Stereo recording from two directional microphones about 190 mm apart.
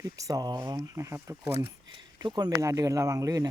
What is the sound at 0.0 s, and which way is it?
Speech, 20° right (ahead or behind).